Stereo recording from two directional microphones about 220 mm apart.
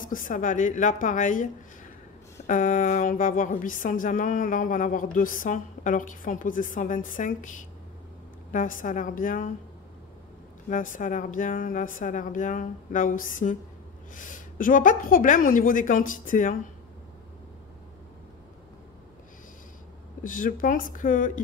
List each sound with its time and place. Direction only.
0.0 s speech: 35° left (ahead or behind)
10.7 s speech: 35° left (ahead or behind)
20.2 s speech: 40° left (ahead or behind)